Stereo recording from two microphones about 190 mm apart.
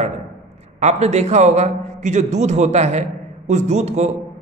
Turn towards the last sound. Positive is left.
turn(degrees=-35)  # may be behind; listen again after turning